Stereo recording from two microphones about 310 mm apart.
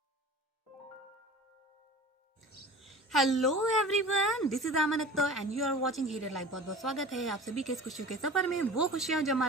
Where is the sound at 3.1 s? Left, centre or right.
Centre.